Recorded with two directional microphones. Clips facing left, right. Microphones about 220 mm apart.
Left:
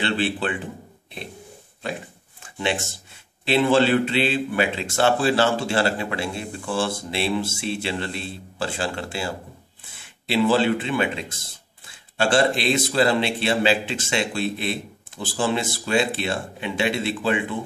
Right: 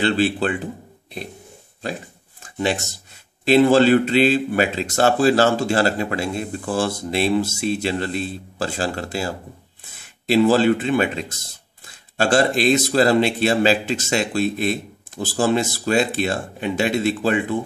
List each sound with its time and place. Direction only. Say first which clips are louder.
0.0 s speech: right 5 dB; 40° right (ahead or behind)
2.4 s a sound: right 3 dB; 40° right (ahead or behind)
3.4 s speech: right 5 dB; 40° right (ahead or behind)